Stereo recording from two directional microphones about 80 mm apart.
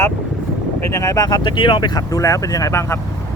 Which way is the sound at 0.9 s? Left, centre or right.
Left.